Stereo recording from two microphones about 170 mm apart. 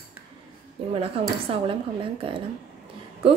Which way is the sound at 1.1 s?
35° right (ahead or behind).